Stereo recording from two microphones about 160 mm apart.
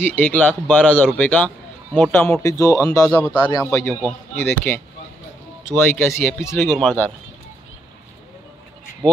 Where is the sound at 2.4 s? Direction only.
20° left (ahead or behind).